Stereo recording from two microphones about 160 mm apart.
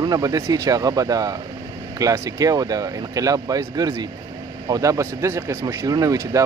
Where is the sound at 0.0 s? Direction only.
20° right (ahead or behind).